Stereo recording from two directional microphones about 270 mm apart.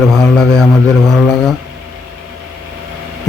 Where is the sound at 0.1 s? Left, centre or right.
Centre.